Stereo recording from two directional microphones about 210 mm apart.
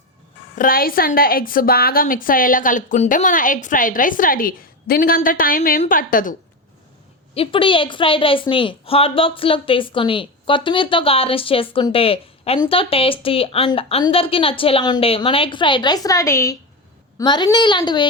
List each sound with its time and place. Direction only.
0.5 s a woman's voice: 40° left (ahead or behind)
7.3 s a woman's voice: 25° left (ahead or behind)